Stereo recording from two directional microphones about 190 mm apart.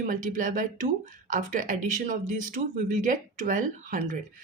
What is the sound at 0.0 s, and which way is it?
Speech, 45° right (ahead or behind).